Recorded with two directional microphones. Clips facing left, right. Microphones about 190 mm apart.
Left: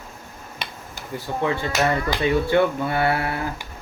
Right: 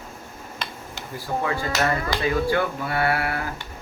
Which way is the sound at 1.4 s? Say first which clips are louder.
Left 3 dB; 25° left (ahead or behind).